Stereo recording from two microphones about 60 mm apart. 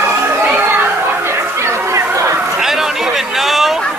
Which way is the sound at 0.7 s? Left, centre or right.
Right.